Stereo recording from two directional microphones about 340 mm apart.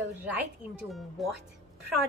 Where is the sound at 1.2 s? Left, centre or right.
Centre.